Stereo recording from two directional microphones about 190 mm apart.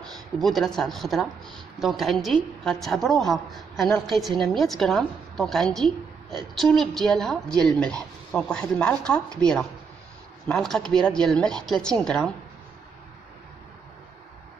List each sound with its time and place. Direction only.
0.0 s a woman's voice: centre (ahead or behind)